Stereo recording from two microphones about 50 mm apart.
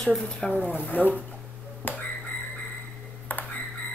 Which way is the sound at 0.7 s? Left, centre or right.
Left.